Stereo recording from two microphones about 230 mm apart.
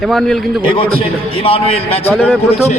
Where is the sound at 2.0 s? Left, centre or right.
Centre.